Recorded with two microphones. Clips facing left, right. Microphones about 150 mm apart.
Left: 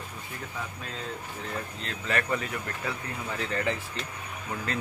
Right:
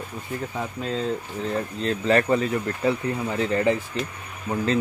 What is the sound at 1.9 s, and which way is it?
Speech, 30° right (ahead or behind).